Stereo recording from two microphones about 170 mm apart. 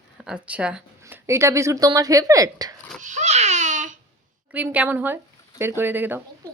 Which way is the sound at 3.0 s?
45° right (ahead or behind).